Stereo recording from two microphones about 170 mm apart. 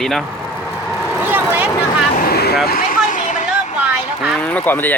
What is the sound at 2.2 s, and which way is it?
Vehicle, 65° left (ahead or behind).